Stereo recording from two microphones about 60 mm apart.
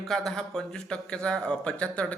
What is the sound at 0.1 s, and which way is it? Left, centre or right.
Speech, centre.